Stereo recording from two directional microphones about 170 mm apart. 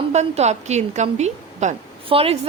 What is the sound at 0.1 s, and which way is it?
A woman's voice, 40° right (ahead or behind).